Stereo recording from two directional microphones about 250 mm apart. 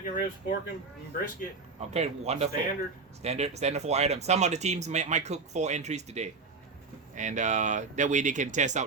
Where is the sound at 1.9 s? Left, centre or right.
Right.